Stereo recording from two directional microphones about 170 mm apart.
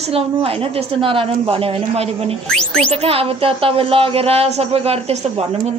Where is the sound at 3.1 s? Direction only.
35° right (ahead or behind).